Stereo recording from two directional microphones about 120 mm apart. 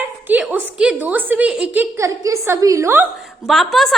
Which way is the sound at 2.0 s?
25° right (ahead or behind).